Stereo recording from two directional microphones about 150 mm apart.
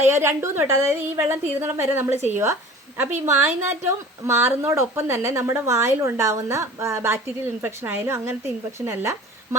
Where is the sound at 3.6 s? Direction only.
15° right (ahead or behind).